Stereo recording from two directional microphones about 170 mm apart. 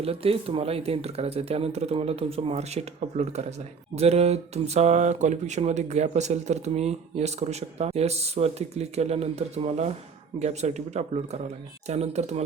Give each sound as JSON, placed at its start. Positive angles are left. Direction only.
{"t": 0.0, "sound": "speech", "side_deg": -35}